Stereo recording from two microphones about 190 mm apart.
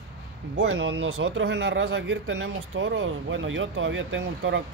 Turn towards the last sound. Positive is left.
turn(degrees=-80)